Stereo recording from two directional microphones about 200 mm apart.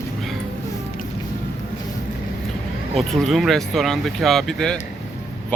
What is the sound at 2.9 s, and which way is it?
Speech, centre (ahead or behind).